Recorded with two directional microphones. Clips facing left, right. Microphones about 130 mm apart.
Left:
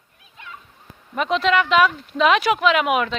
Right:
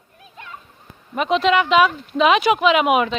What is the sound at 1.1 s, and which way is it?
Speech, 10° right (ahead or behind).